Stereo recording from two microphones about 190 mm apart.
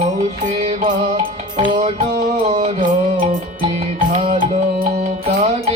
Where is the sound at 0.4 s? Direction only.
30° right (ahead or behind).